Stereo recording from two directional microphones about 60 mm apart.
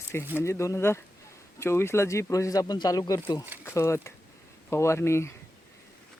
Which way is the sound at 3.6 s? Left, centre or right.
Left.